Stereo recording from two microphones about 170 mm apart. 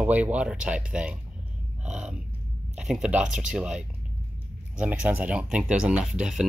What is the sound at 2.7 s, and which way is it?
Speech, 5° right (ahead or behind).